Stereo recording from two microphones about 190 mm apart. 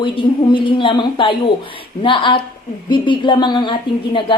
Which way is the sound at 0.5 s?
25° left (ahead or behind).